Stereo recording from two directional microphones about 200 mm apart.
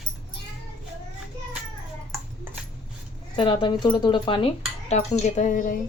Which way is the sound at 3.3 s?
25° left (ahead or behind).